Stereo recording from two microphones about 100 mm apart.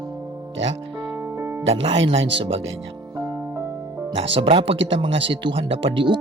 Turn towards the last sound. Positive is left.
turn(degrees=-55)  # may be behind; listen again after turning